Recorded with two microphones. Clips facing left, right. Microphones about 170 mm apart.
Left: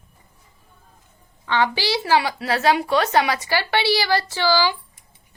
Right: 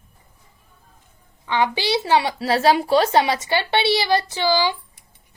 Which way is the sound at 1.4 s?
15° right (ahead or behind).